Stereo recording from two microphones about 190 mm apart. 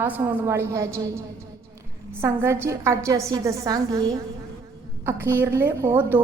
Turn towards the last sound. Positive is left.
turn(degrees=-10)  # may be behind; listen again after turning